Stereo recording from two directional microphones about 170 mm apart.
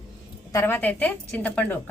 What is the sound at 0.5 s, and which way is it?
A woman's voice, 10° left (ahead or behind).